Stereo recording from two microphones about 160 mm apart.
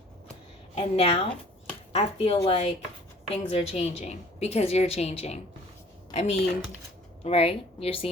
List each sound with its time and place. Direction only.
0.8 s a woman's voice: 40° left (ahead or behind)